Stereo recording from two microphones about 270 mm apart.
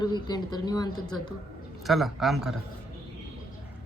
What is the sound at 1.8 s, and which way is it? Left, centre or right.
Speech, centre.